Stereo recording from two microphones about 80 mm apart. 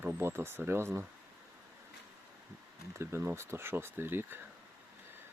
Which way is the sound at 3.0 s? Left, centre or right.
Right.